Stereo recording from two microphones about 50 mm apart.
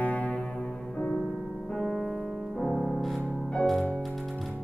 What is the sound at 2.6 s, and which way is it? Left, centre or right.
Music, centre.